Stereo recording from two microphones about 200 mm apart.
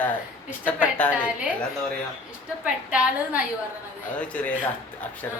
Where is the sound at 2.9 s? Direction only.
5° right (ahead or behind).